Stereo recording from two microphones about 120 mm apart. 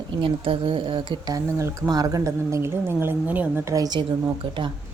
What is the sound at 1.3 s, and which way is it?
A woman's voice, 25° right (ahead or behind).